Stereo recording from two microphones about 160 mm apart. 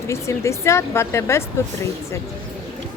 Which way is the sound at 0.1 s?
15° left (ahead or behind).